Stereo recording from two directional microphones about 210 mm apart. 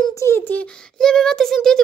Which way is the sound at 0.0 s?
15° left (ahead or behind).